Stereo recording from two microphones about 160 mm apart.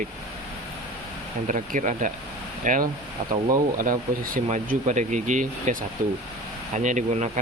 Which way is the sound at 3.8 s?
60° right (ahead or behind).